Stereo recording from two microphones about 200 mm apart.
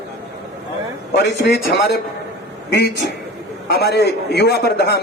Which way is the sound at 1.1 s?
60° left (ahead or behind).